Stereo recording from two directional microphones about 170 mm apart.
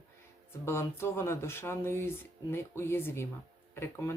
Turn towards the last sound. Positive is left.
turn(degrees=15)  # may be behind; listen again after turning